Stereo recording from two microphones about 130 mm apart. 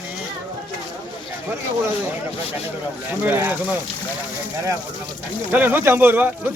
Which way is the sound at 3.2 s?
15° right (ahead or behind).